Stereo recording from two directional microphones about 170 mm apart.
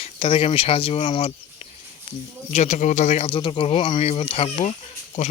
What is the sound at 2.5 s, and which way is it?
Speech, 40° left (ahead or behind).